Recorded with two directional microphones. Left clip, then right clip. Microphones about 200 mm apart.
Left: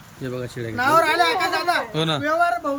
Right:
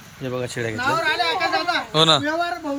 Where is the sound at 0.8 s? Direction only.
30° left (ahead or behind).